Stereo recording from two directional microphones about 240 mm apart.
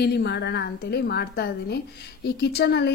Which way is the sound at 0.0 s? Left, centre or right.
Left.